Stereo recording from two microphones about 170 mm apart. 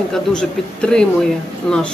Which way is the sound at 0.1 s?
5° left (ahead or behind).